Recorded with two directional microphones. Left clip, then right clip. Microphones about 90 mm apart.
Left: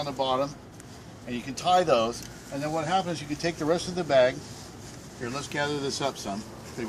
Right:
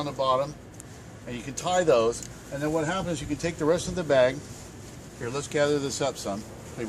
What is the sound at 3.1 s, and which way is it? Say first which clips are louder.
Speech: even; 75° right (ahead or behind).